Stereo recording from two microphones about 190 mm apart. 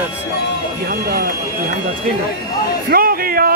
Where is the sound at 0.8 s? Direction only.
50° right (ahead or behind).